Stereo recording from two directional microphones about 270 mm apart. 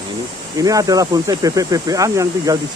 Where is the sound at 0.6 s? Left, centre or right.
Centre.